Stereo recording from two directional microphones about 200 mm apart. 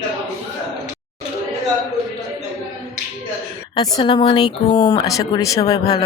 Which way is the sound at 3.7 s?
20° left (ahead or behind).